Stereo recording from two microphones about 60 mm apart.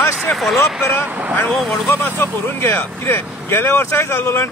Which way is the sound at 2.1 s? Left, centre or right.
Left.